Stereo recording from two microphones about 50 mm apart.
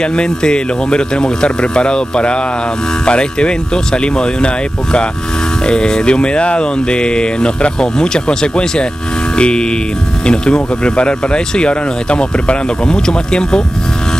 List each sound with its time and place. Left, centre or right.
0.0 s speech: centre
5.7 s speech: centre